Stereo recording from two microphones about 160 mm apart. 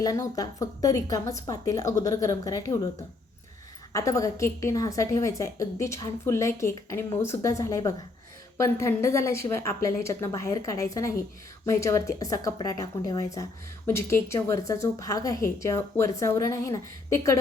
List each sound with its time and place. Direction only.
0.0 s a woman's voice: 20° left (ahead or behind)
3.9 s a woman's voice: 20° left (ahead or behind)